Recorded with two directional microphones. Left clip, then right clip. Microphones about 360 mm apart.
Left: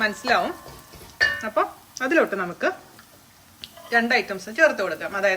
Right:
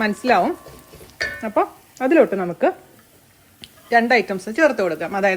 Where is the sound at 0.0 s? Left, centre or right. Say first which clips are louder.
Right 4 dB; centre.